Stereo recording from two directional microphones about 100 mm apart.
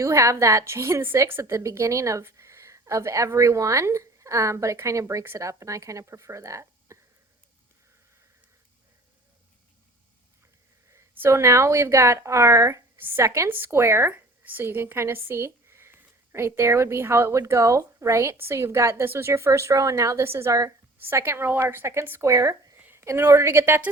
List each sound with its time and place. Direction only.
0.0 s a woman's voice: 30° right (ahead or behind)
10.9 s a woman's voice: 25° right (ahead or behind)
22.8 s a woman's voice: 25° right (ahead or behind)